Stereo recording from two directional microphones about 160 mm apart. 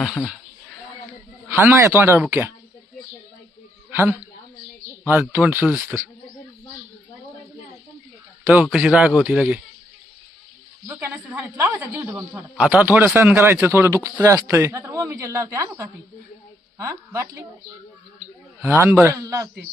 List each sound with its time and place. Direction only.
0.0 s speech: centre (ahead or behind)
1.5 s a man's voice: 15° right (ahead or behind)
5.3 s a man's voice: 10° right (ahead or behind)
8.6 s a man's voice: 5° right (ahead or behind)
10.8 s a man's voice: 10° right (ahead or behind)
18.6 s a man's voice: 15° right (ahead or behind)